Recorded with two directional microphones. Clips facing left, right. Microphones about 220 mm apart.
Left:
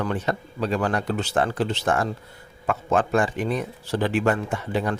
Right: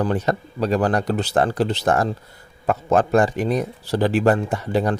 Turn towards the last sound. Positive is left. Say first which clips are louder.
# right 4 dB
turn(degrees=-40)  # may be behind; listen again after turning